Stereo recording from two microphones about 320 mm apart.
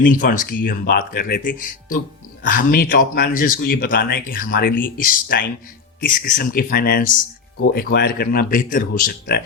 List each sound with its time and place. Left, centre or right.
0.1 s speech: left